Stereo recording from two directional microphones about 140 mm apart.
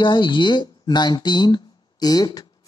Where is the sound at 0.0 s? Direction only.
35° left (ahead or behind).